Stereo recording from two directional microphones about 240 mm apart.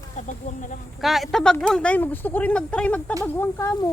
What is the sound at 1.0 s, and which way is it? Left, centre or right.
Speech, centre.